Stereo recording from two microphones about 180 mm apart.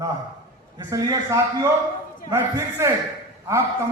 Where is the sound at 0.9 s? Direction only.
15° right (ahead or behind).